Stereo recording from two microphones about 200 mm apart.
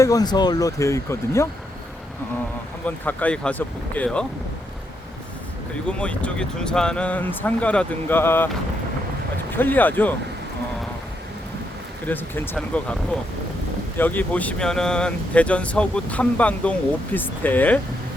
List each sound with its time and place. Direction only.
0.0 s speech: 20° left (ahead or behind)
2.8 s speech: 10° left (ahead or behind)
5.9 s speech: 5° left (ahead or behind)
9.5 s speech: 10° left (ahead or behind)
12.0 s speech: 10° left (ahead or behind)